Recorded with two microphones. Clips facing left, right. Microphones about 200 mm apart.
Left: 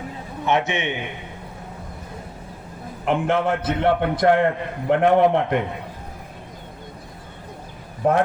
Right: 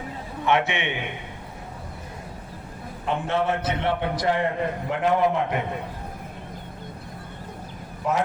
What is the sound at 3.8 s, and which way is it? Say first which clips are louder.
A man's voice: left 8 dB; 55° left (ahead or behind).